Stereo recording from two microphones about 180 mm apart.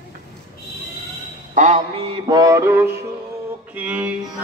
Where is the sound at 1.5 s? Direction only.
40° right (ahead or behind); by 2.9 s 15° right (ahead or behind).